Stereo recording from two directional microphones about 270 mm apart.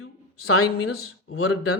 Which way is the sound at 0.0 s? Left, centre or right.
Left.